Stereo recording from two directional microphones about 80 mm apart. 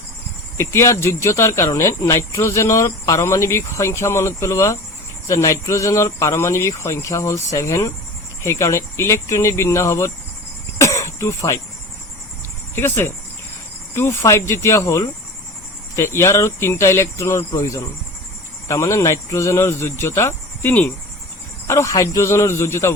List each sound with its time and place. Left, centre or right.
0.5 s speech: left
10.8 s throat clearing: left
12.7 s speech: left
21.7 s speech: left